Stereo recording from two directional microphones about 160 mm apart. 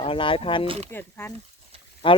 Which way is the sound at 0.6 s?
40° right (ahead or behind).